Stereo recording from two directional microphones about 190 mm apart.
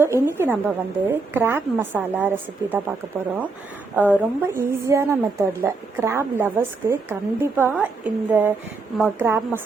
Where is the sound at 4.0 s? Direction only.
10° right (ahead or behind).